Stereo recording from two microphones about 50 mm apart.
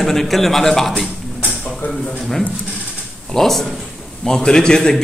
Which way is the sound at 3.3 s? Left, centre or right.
Centre.